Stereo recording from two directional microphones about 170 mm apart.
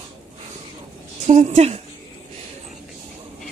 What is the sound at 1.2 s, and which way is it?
Speech, 45° right (ahead or behind).